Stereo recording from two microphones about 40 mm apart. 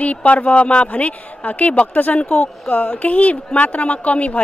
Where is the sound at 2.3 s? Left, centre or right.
Left.